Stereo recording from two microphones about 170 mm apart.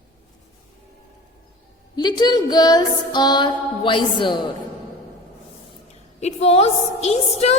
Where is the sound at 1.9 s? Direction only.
25° left (ahead or behind).